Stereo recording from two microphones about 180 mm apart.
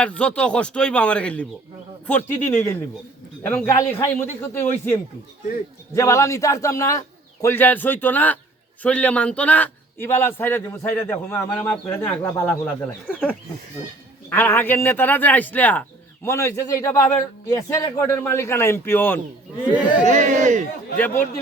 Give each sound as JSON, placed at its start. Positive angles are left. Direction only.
{"t": 0.0, "sound": "a man's voice", "side_deg": 5}
{"t": 14.3, "sound": "a man's voice", "side_deg": 10}
{"t": 20.1, "sound": "speech", "side_deg": -40}